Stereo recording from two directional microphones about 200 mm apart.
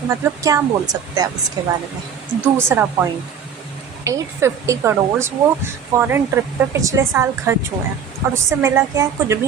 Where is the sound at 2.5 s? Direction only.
10° right (ahead or behind).